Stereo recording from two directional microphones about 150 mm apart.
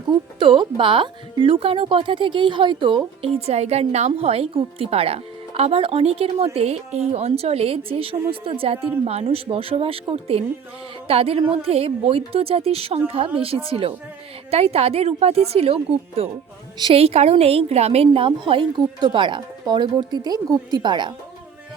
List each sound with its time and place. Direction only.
0.1 s speech: 35° right (ahead or behind)
3.2 s speech: 45° right (ahead or behind)